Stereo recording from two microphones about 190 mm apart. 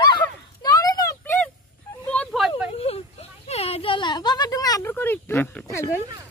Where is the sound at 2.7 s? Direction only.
30° left (ahead or behind).